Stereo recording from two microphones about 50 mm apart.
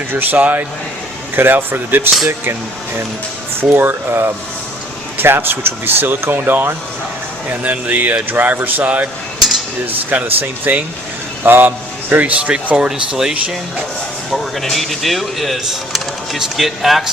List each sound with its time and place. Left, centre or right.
0.1 s speech: right
1.4 s speech: right
7.5 s speech: right
12.7 s speech: centre
14.3 s speech: centre